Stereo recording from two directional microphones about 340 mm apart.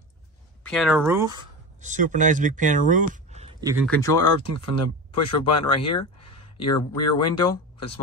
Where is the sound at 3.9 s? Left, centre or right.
Centre.